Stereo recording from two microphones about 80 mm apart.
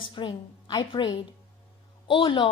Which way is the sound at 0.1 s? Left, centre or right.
Left.